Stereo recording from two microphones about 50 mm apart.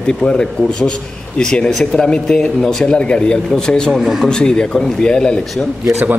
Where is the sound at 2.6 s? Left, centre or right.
Centre.